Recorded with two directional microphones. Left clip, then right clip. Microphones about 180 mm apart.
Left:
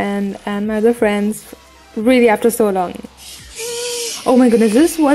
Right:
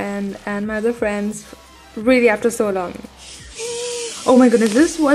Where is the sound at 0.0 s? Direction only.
25° left (ahead or behind).